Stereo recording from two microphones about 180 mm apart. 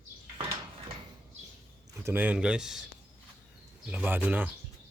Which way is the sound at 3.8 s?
10° right (ahead or behind).